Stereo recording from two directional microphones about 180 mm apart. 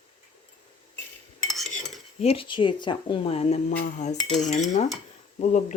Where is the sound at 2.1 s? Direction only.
35° left (ahead or behind).